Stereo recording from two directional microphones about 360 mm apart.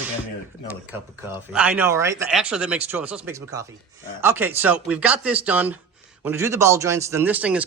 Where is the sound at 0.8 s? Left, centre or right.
Centre.